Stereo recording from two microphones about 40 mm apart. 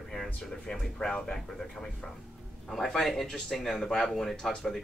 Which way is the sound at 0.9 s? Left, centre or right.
Left.